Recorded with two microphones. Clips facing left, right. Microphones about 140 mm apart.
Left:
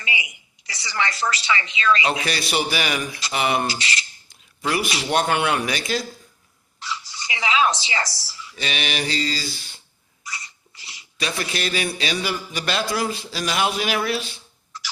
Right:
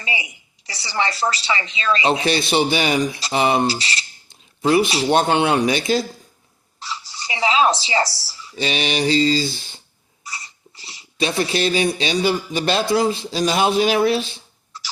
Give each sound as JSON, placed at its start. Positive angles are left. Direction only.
{"t": 0.0, "sound": "a woman's voice", "side_deg": -35}